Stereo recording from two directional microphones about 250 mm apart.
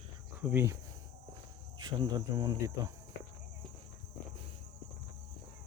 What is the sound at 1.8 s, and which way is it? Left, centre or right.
Speech, centre.